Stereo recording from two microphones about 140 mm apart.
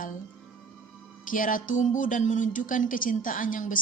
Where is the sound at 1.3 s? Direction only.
70° left (ahead or behind).